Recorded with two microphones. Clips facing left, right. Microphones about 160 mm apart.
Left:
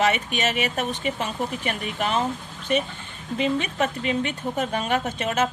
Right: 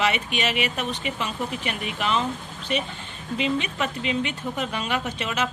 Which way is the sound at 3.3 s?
45° left (ahead or behind).